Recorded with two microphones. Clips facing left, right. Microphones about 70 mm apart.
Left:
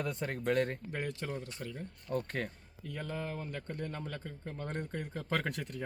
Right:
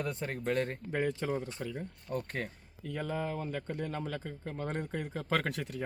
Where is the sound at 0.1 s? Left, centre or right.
Right.